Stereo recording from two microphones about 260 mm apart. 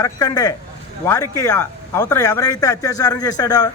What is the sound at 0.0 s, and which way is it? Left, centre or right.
Speech, centre.